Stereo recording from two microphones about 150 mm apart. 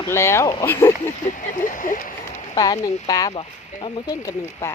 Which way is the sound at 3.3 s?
35° left (ahead or behind).